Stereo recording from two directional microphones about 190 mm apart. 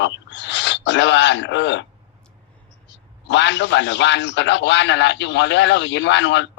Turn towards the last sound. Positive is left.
turn(degrees=70)  # may be behind; listen again after turning